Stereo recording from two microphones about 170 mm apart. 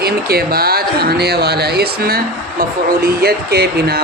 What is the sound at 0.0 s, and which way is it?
Speech, 65° right (ahead or behind).